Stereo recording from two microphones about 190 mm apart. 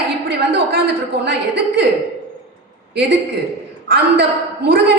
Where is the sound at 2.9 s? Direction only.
65° right (ahead or behind).